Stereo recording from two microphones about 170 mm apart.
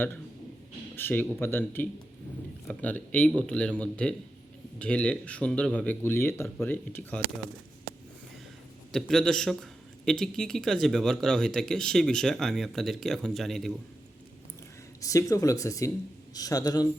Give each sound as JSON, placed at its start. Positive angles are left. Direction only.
{"t": 0.9, "sound": "speech", "side_deg": 10}
{"t": 8.9, "sound": "speech", "side_deg": 5}
{"t": 15.0, "sound": "speech", "side_deg": 20}